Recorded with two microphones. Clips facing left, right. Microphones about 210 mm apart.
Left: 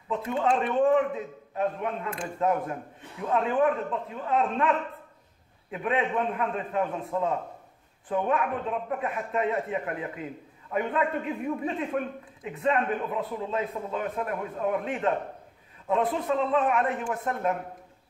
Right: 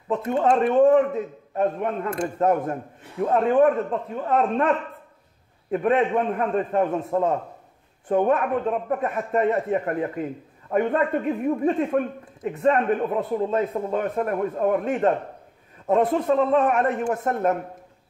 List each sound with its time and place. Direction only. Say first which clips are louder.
0.1 s a man's voice: right 5 dB; 45° right (ahead or behind)